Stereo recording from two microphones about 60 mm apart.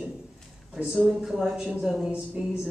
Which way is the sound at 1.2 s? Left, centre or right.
Centre.